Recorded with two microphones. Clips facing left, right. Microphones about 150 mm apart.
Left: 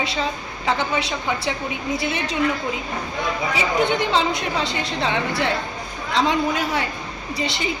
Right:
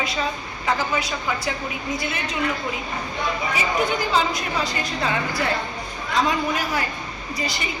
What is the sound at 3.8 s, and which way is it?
A woman's voice, 25° left (ahead or behind).